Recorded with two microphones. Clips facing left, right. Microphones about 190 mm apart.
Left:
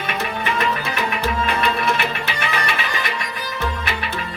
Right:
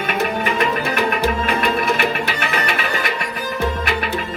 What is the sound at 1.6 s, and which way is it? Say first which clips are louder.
Music: right 2 dB; 50° right (ahead or behind).